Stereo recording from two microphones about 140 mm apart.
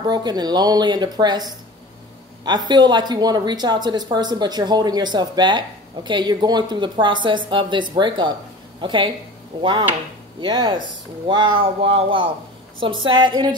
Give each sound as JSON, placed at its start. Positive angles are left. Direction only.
{"t": 0.0, "sound": "a woman's voice", "side_deg": -30}